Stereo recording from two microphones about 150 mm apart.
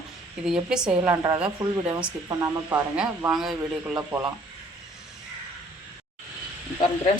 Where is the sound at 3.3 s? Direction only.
5° right (ahead or behind).